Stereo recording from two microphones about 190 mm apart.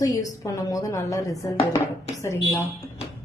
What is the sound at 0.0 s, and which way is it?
Speech, 15° left (ahead or behind).